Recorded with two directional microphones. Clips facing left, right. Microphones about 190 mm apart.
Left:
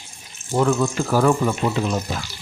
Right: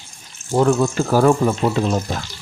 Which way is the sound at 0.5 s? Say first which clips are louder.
Right 3 dB; 35° right (ahead or behind).